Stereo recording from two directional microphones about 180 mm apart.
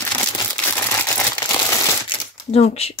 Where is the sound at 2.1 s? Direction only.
35° left (ahead or behind).